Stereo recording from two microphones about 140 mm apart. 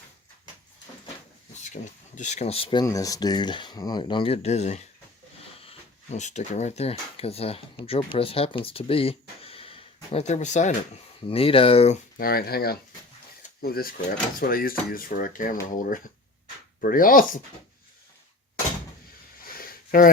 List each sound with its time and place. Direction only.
1.6 s speech: 60° left (ahead or behind); by 2.8 s 40° left (ahead or behind)
2.8 s speech: 25° left (ahead or behind); by 10.8 s 60° left (ahead or behind)
11.3 s speech: 40° left (ahead or behind)
12.1 s dishes: 90° left
15.6 s speech: 75° left (ahead or behind)
16.8 s speech: 85° left
19.5 s a sound: 90° left